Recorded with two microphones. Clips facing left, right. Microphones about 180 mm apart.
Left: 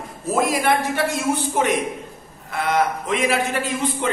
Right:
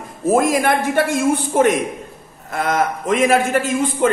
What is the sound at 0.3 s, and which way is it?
A man's voice, 50° right (ahead or behind).